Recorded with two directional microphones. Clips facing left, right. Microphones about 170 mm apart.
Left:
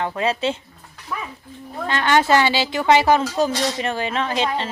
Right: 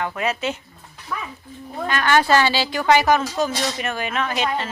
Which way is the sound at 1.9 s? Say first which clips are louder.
Left 1 dB; 25° left (ahead or behind).